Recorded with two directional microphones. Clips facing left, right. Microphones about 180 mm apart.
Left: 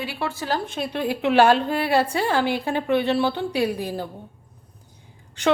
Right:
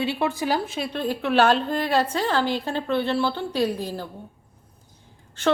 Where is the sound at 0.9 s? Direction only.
10° left (ahead or behind).